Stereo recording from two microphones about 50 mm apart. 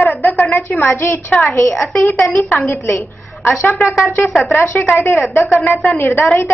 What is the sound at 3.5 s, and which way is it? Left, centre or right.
A woman's voice, left.